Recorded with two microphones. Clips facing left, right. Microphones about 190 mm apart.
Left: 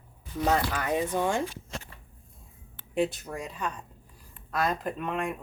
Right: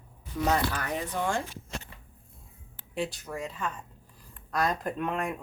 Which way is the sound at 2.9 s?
20° left (ahead or behind).